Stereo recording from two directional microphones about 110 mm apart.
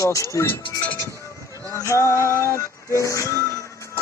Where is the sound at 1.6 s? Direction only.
30° left (ahead or behind).